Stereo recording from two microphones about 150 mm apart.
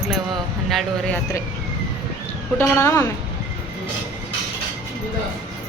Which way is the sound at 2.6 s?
15° left (ahead or behind).